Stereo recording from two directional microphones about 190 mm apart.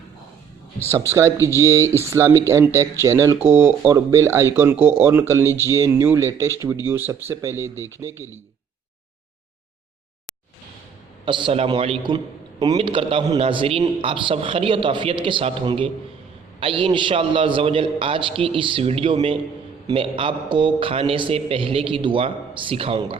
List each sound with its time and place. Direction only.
1.1 s speech: 15° right (ahead or behind)
11.3 s a man's voice: 25° right (ahead or behind)